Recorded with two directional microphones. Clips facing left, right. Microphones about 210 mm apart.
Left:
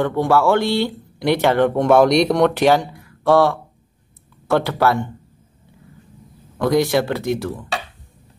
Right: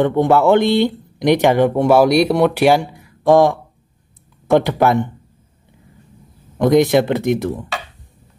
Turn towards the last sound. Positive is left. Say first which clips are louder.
# right 4 dB
turn(degrees=-20)  # may be behind; listen again after turning